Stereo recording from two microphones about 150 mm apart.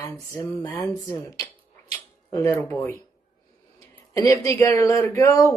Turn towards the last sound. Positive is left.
turn(degrees=20)  # may be behind; listen again after turning